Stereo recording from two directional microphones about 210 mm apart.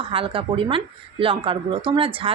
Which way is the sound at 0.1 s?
25° right (ahead or behind).